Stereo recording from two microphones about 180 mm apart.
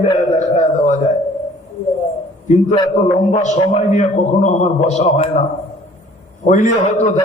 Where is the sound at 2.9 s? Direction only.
40° left (ahead or behind).